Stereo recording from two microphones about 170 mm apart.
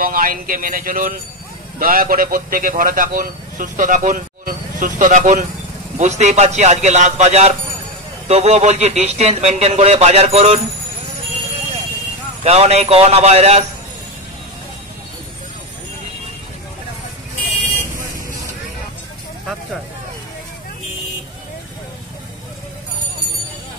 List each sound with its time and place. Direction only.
0.0 s a man's voice: 55° right (ahead or behind); by 10.6 s 40° right (ahead or behind)
12.4 s speech: 40° right (ahead or behind)